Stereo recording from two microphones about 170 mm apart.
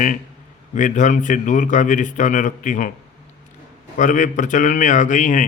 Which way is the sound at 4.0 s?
50° left (ahead or behind).